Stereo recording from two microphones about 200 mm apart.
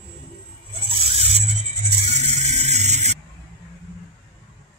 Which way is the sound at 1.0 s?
30° right (ahead or behind).